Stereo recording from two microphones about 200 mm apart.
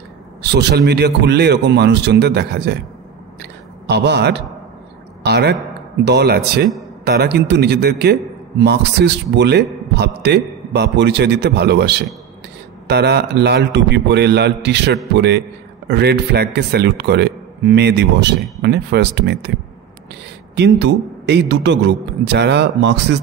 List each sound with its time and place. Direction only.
0.4 s a man's voice: 55° right (ahead or behind)
3.8 s a man's voice: 55° right (ahead or behind)
20.5 s a man's voice: 60° right (ahead or behind)